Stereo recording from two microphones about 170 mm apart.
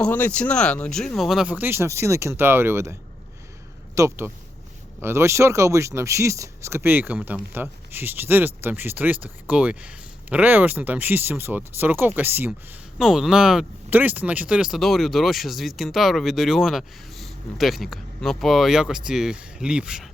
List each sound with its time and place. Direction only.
0.0 s speech: 10° left (ahead or behind)